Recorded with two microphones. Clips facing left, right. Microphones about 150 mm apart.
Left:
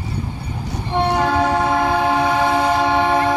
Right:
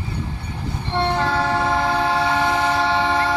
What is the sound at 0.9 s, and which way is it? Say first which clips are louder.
Train: left 3 dB; 15° left (ahead or behind).